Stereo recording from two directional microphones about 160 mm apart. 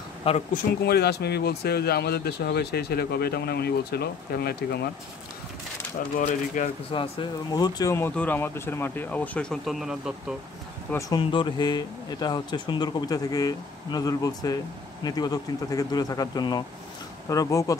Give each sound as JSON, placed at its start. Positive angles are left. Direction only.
{"t": 0.2, "sound": "speech", "side_deg": 35}
{"t": 0.8, "sound": "speech", "side_deg": 90}
{"t": 6.1, "sound": "speech", "side_deg": 50}
{"t": 6.9, "sound": "speech", "side_deg": 30}
{"t": 10.9, "sound": "speech", "side_deg": 20}
{"t": 11.1, "sound": "speech", "side_deg": 30}